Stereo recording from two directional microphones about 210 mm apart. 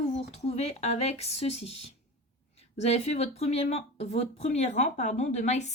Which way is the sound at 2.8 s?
30° left (ahead or behind).